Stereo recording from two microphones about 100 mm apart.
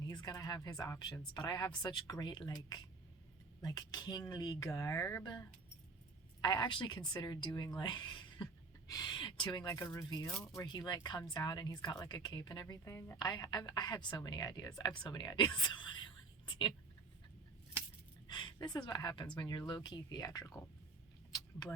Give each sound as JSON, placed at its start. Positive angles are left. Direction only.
{"t": 0.1, "sound": "speech", "side_deg": 45}
{"t": 6.4, "sound": "speech", "side_deg": 50}
{"t": 10.2, "sound": "speech", "side_deg": 5}
{"t": 10.7, "sound": "speech", "side_deg": 45}
{"t": 12.8, "sound": "a woman's voice", "side_deg": 30}
{"t": 13.1, "sound": "speech", "side_deg": 45}
{"t": 18.3, "sound": "speech", "side_deg": 50}